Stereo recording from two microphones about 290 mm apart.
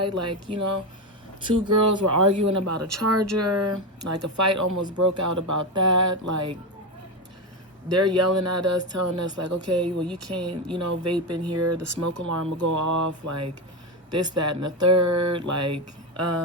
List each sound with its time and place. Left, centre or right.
0.0 s speech: right
1.7 s speech: right
7.9 s speech: right
10.8 s speech: right